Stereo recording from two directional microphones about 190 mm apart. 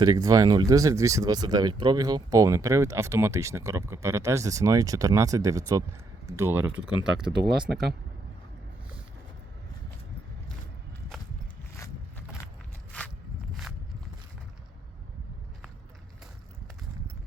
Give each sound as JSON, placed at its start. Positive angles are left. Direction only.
{"t": 0.0, "sound": "speech", "side_deg": -20}
{"t": 7.7, "sound": "speech", "side_deg": -60}
{"t": 13.5, "sound": "walk", "side_deg": 0}